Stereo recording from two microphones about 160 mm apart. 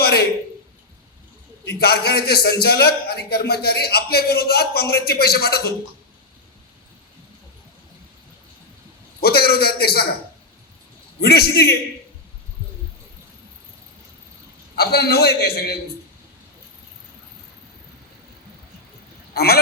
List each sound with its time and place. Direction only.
0.0 s a sound: 80° left
1.6 s a man's voice: 80° left
9.2 s a man's voice: 75° left (ahead or behind)
11.2 s a man's voice: 80° left
14.8 s a man's voice: 80° left
19.3 s quack: 80° left